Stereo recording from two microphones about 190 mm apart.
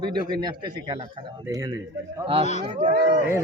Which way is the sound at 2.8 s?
40° right (ahead or behind).